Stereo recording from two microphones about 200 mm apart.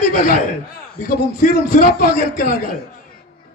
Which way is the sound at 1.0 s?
45° left (ahead or behind).